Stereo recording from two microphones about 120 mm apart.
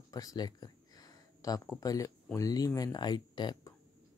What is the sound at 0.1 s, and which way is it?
Speech, 30° left (ahead or behind).